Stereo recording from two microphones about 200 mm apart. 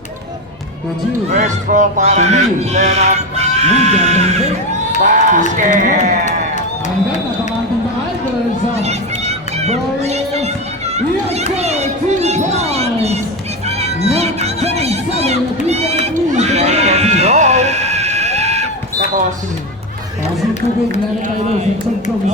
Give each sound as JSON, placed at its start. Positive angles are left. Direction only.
{"t": 1.3, "sound": "speech", "side_deg": -40}
{"t": 8.7, "sound": "crowd", "side_deg": -35}
{"t": 10.9, "sound": "children playing", "side_deg": -30}
{"t": 11.5, "sound": "music", "side_deg": -35}